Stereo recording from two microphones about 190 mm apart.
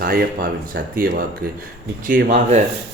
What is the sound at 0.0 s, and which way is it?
Speech, 50° right (ahead or behind).